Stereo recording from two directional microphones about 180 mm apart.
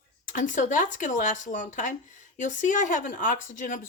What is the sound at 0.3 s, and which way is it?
Speech, 45° left (ahead or behind).